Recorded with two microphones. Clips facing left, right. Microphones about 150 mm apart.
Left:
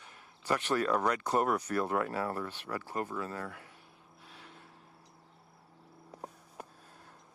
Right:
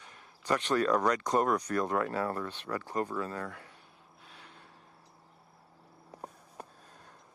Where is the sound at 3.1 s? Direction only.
40° right (ahead or behind).